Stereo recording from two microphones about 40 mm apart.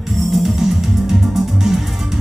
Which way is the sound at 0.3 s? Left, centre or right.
Centre.